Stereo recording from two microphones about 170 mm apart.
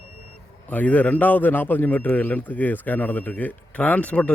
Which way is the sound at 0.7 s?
10° left (ahead or behind).